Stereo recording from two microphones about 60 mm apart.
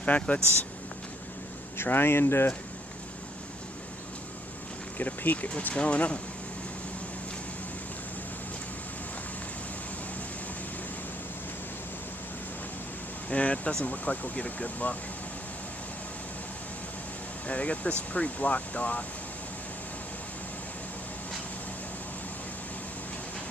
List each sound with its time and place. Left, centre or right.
0.0 s speech: left
1.8 s speech: left
4.9 s speech: left
13.3 s speech: left
17.5 s speech: left